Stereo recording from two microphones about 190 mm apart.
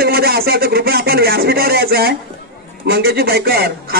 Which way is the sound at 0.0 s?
55° right (ahead or behind).